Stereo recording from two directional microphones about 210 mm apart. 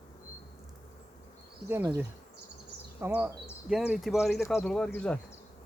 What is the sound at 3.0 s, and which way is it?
Speech, 10° right (ahead or behind).